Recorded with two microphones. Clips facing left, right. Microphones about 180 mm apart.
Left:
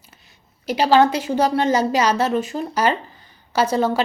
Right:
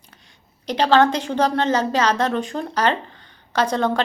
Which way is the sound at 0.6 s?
10° left (ahead or behind).